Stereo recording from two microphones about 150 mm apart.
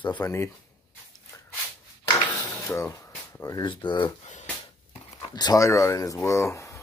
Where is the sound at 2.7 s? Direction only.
20° left (ahead or behind).